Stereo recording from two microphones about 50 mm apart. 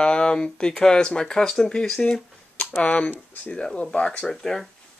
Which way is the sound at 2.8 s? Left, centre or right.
Left.